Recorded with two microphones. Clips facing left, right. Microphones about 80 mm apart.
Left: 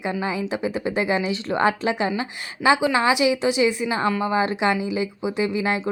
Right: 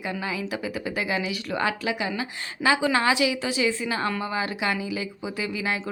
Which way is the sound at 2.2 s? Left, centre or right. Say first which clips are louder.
Left 2 dB; left.